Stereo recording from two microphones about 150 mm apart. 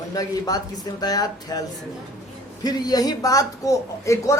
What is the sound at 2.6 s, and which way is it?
A man's voice, 25° left (ahead or behind).